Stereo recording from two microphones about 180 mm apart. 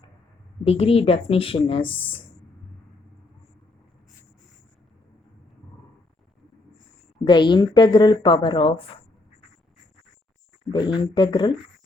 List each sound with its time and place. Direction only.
0.6 s speech: 35° left (ahead or behind)
7.3 s a woman's voice: 25° left (ahead or behind)
10.7 s a woman's voice: 25° left (ahead or behind)